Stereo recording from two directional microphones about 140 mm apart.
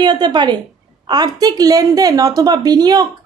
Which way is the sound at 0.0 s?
30° right (ahead or behind).